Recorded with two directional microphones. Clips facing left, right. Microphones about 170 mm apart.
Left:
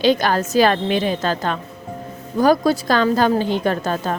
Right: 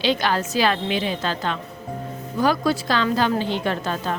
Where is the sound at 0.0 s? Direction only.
45° left (ahead or behind).